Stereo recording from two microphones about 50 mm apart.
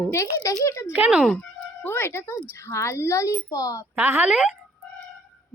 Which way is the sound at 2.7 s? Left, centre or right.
Left.